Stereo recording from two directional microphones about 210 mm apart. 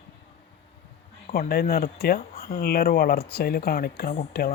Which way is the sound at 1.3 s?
45° left (ahead or behind).